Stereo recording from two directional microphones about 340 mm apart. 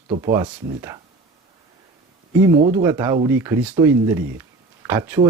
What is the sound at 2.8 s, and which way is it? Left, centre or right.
Speech, centre.